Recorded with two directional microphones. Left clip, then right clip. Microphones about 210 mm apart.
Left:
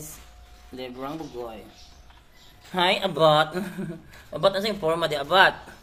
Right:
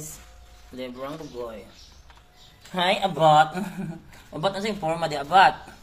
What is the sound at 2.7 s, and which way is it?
A woman's voice, 15° left (ahead or behind).